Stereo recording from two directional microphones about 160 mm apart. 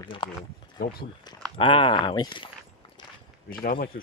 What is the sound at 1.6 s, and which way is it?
Speech, 30° left (ahead or behind).